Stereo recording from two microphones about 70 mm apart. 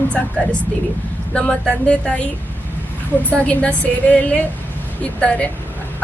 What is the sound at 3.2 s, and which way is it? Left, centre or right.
A woman's voice, centre.